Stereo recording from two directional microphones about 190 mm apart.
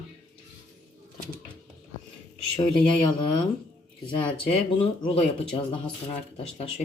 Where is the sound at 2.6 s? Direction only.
25° left (ahead or behind).